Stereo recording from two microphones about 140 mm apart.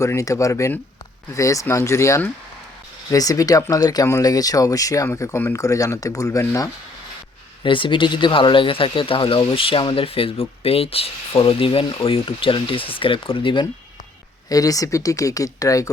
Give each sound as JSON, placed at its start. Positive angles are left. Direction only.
{"t": 0.0, "sound": "speech", "side_deg": 20}
{"t": 7.6, "sound": "speech", "side_deg": 35}
{"t": 14.5, "sound": "speech", "side_deg": 25}